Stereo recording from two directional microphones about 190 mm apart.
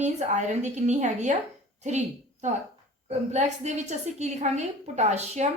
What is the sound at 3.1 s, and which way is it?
A woman's voice, 35° right (ahead or behind).